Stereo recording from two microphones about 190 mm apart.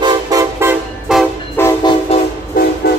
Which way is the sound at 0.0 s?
15° right (ahead or behind).